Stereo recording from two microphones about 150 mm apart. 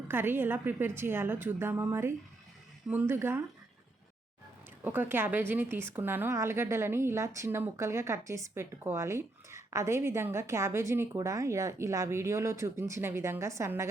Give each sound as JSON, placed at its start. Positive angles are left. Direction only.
{"t": 0.1, "sound": "a woman's voice", "side_deg": -15}
{"t": 4.8, "sound": "a woman's voice", "side_deg": -10}